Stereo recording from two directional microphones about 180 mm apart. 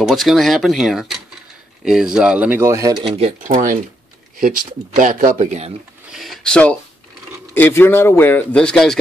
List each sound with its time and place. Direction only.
0.0 s speech: centre (ahead or behind); by 3.1 s 20° right (ahead or behind)
3.2 s speech: 35° right (ahead or behind)
4.4 s speech: 50° right (ahead or behind)
6.1 s a man's voice: centre (ahead or behind)